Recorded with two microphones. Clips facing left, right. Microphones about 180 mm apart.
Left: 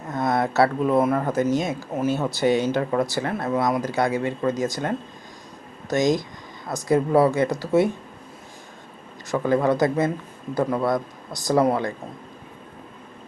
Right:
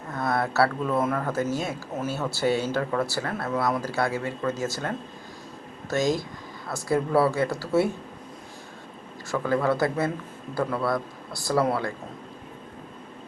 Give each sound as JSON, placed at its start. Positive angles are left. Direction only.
{"t": 0.1, "sound": "a sound", "side_deg": 20}
{"t": 1.2, "sound": "a man's voice", "side_deg": 20}
{"t": 9.3, "sound": "a man's voice", "side_deg": 20}